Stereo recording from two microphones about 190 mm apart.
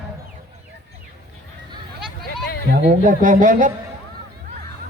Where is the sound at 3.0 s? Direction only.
45° right (ahead or behind).